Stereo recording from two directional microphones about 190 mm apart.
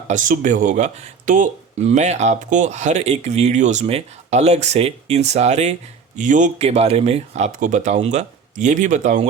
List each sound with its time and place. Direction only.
0.1 s speech: 40° right (ahead or behind)